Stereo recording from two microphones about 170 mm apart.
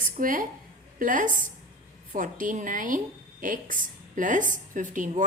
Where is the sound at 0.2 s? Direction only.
55° right (ahead or behind).